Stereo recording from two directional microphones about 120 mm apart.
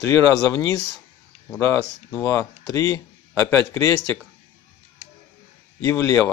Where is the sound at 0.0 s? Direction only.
30° left (ahead or behind).